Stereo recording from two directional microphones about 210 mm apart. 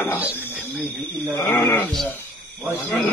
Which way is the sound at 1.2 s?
5° left (ahead or behind).